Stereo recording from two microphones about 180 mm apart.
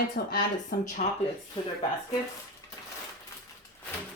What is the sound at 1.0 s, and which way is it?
Speech, 40° left (ahead or behind).